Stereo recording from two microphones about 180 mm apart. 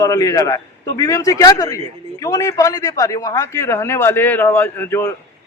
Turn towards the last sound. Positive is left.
turn(degrees=15)  # may be behind; listen again after turning